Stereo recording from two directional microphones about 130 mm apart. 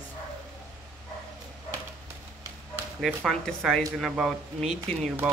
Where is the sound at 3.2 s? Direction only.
Centre (ahead or behind).